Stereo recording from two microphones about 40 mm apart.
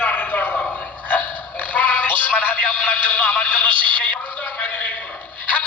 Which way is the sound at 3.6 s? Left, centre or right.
Left.